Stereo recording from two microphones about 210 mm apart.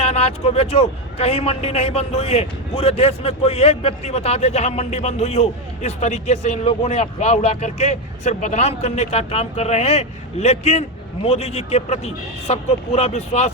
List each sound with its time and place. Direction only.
0.0 s a man's voice: 30° left (ahead or behind)